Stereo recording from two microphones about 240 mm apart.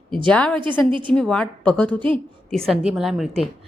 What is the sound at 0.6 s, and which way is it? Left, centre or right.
Speech, centre.